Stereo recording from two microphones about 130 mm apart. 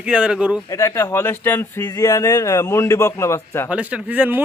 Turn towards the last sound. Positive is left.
turn(degrees=-15)  # may be behind; listen again after turning